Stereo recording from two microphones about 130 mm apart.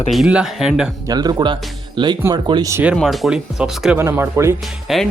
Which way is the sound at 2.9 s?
Centre (ahead or behind).